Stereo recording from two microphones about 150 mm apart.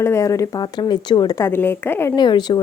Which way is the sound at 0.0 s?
20° left (ahead or behind).